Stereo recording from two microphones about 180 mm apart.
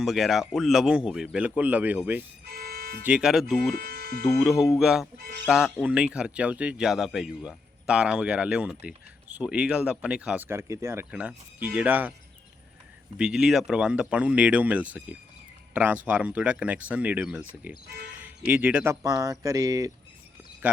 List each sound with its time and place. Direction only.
0.0 s speech: centre (ahead or behind)
2.5 s music: 60° right (ahead or behind)
3.0 s speech: 5° right (ahead or behind)
3.8 s speech: 55° right (ahead or behind)
4.8 s speech: 5° right (ahead or behind)
13.1 s speech: 5° right (ahead or behind)
19.0 s speech: 20° right (ahead or behind)